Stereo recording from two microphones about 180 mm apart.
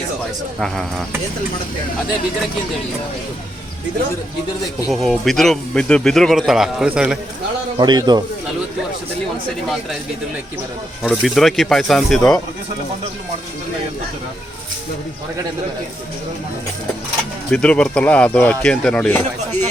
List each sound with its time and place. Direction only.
0.6 s speech: centre (ahead or behind)
4.9 s speech: centre (ahead or behind)
7.8 s speech: 20° right (ahead or behind)
11.0 s speech: 5° left (ahead or behind)
17.5 s speech: 5° left (ahead or behind)